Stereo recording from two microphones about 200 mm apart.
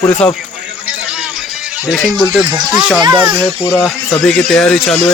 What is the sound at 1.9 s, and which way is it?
Speech, centre (ahead or behind).